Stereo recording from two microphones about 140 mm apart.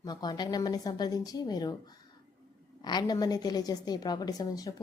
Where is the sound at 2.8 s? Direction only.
30° left (ahead or behind).